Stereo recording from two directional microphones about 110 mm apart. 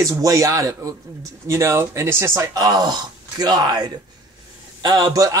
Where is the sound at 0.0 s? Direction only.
30° right (ahead or behind).